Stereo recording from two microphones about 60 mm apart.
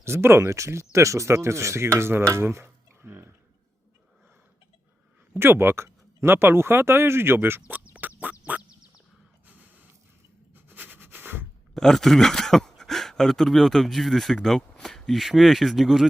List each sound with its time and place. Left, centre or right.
0.0 s speech: right
2.3 s a sound: right
5.3 s speech: right
8.2 s music: right
10.5 s a sound: right
11.7 s speech: centre